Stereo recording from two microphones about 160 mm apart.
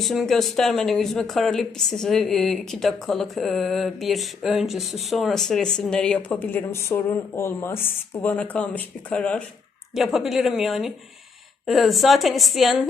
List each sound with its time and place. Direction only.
0.0 s speech: centre (ahead or behind)